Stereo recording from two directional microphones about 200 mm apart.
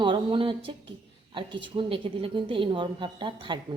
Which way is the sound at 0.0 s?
25° right (ahead or behind).